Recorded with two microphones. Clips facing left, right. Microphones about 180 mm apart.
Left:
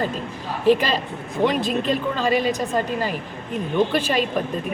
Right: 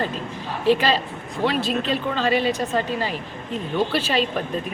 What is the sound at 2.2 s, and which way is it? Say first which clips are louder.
Speech: even; 45° left (ahead or behind).